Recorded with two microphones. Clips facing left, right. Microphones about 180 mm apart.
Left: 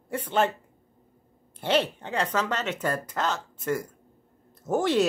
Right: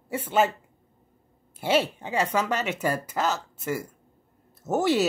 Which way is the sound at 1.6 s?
5° right (ahead or behind).